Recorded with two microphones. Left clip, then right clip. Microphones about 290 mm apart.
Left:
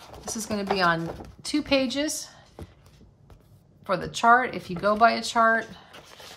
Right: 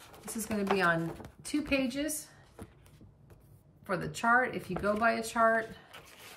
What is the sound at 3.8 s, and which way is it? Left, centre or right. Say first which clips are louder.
A woman's voice: left 9 dB; centre.